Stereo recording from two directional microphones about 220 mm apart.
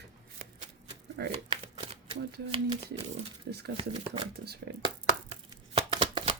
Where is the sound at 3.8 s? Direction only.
25° right (ahead or behind).